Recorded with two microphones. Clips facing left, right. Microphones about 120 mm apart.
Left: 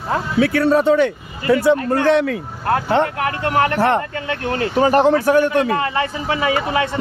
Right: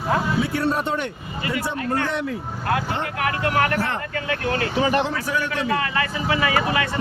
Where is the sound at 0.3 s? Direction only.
90° left.